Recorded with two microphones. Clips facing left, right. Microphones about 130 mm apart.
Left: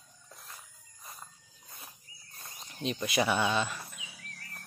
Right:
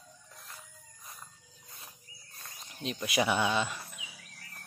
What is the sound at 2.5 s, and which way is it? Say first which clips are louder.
Speech: left 3 dB; centre (ahead or behind).